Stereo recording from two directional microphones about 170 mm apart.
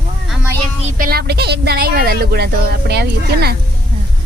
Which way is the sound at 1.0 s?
65° right (ahead or behind).